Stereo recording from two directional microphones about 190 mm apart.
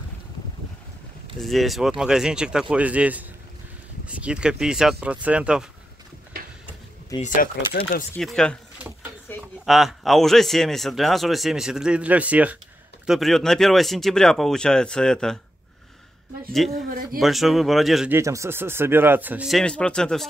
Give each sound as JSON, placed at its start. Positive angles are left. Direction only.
{"t": 1.4, "sound": "speech", "side_deg": 0}
{"t": 7.2, "sound": "speech", "side_deg": 45}
{"t": 8.2, "sound": "speech", "side_deg": 5}
{"t": 9.3, "sound": "a sound", "side_deg": 10}
{"t": 9.7, "sound": "speech", "side_deg": 0}
{"t": 16.5, "sound": "speech", "side_deg": 0}
{"t": 18.1, "sound": "speech", "side_deg": -15}